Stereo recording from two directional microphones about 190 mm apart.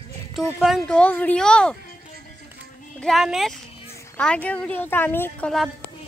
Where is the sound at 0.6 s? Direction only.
Centre (ahead or behind).